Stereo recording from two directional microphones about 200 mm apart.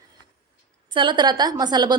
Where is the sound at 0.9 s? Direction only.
20° right (ahead or behind).